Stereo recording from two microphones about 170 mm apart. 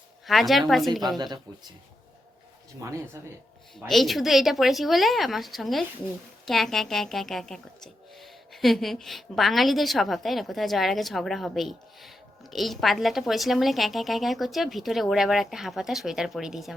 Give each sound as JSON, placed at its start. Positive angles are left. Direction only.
{"t": 0.3, "sound": "speech", "side_deg": 0}
{"t": 1.2, "sound": "speech", "side_deg": -25}
{"t": 2.8, "sound": "speech", "side_deg": -20}
{"t": 3.8, "sound": "speech", "side_deg": 0}